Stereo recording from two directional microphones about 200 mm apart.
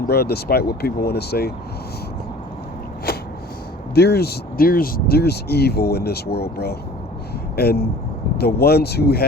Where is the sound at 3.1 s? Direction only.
50° left (ahead or behind).